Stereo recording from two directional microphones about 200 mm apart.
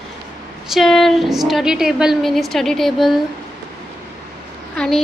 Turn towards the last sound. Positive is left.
turn(degrees=5)  # may be behind; listen again after turning